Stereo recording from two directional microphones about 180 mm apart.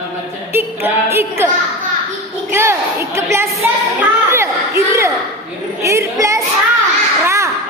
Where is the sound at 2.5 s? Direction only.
15° right (ahead or behind).